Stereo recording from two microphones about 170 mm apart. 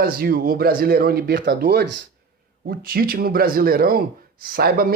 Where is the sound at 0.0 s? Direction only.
60° right (ahead or behind).